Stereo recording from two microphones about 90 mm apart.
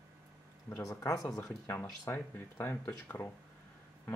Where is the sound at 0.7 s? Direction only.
35° left (ahead or behind).